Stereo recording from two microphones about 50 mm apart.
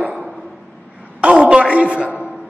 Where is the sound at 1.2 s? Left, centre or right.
Centre.